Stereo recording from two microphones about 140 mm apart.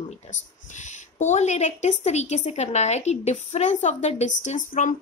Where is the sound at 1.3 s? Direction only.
55° left (ahead or behind).